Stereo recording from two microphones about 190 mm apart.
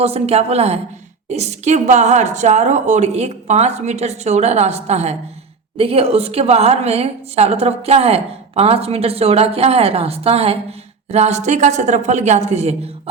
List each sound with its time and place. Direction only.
0.0 s a woman's voice: 35° right (ahead or behind)